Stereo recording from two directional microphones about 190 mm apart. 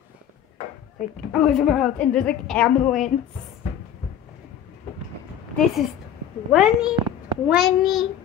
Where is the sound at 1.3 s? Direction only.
Centre (ahead or behind).